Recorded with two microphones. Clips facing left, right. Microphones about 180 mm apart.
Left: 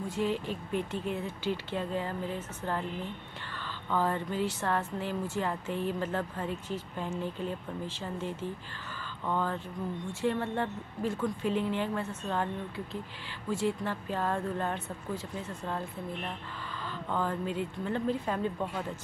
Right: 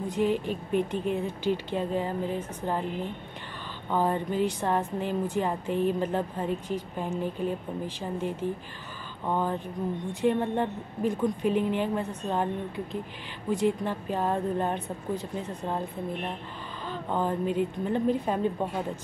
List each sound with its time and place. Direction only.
0.1 s a woman's voice: 15° right (ahead or behind)
3.9 s a woman's voice: 15° right (ahead or behind)